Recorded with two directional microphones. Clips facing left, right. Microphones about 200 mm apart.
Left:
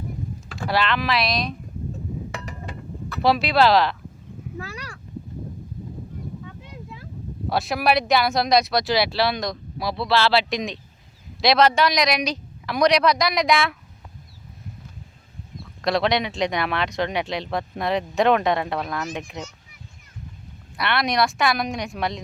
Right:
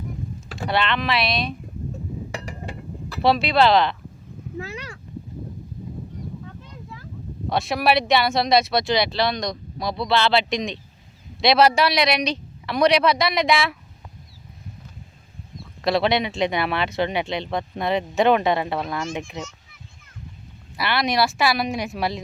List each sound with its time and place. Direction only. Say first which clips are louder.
0.7 s speech: even; centre (ahead or behind)
2.3 s chink: right 1 dB; 35° right (ahead or behind)
3.2 s speech: even; centre (ahead or behind)
7.5 s speech: right 1 dB; centre (ahead or behind)
15.8 s speech: right 1 dB; centre (ahead or behind)
20.7 s speech: even; centre (ahead or behind)